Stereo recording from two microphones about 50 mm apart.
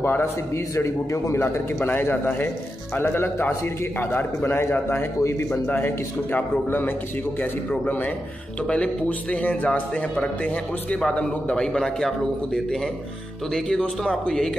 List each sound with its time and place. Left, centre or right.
0.0 s a man's voice: left
0.7 s a man's voice: left
1.4 s speech: left
5.2 s a man's voice: left
5.7 s a man's voice: left
8.6 s a man's voice: left
13.7 s a man's voice: centre